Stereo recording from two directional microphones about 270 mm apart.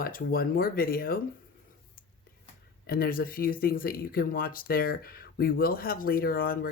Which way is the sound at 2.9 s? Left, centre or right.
Left.